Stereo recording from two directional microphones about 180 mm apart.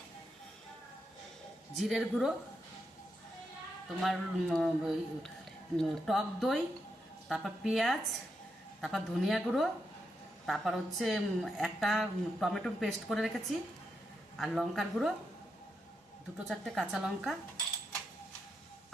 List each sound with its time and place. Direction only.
1.7 s a woman's voice: centre (ahead or behind)
4.0 s a woman's voice: centre (ahead or behind)
14.3 s a woman's voice: centre (ahead or behind)
16.5 s a woman's voice: centre (ahead or behind)